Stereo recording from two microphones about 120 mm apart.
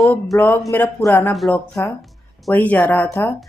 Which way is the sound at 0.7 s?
15° left (ahead or behind).